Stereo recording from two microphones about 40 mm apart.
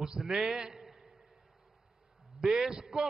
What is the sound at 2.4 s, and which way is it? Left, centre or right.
Speech, centre.